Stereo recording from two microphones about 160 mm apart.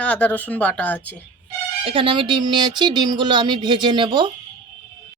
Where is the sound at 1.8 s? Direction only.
35° right (ahead or behind).